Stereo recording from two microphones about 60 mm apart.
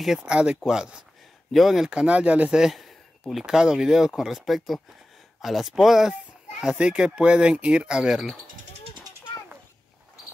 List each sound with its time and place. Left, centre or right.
0.0 s speech: centre
1.9 s speech: centre
2.5 s a sound: centre
3.4 s speech: centre